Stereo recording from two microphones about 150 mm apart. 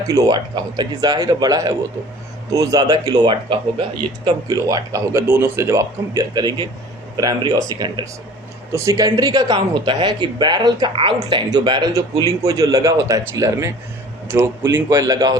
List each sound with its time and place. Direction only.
0.1 s speech: 25° right (ahead or behind)
14.8 s speech: 15° right (ahead or behind)